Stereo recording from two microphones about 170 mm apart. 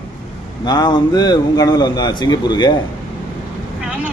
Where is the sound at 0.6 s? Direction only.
25° left (ahead or behind).